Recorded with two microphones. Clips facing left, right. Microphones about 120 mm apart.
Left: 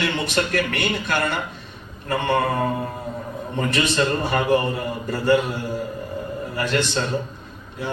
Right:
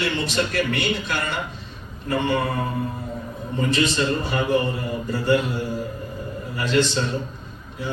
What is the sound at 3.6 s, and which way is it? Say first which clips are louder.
Speech: even; 60° left (ahead or behind).